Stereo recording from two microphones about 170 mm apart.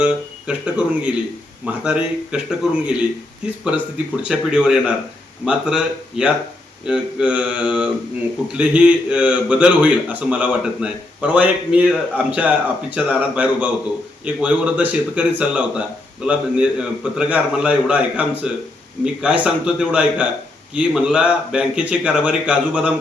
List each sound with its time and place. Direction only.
0.0 s a man's voice: 5° right (ahead or behind)